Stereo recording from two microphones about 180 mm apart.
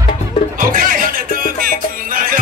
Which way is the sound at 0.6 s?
50° right (ahead or behind).